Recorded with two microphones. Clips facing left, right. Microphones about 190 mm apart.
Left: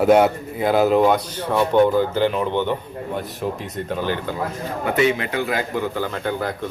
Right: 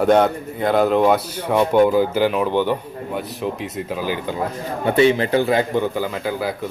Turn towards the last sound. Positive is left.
turn(degrees=-5)  # may be behind; listen again after turning